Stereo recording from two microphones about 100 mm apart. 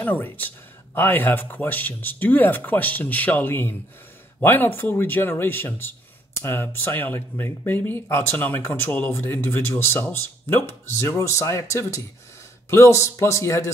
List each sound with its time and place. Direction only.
0.0 s a man's voice: 15° left (ahead or behind)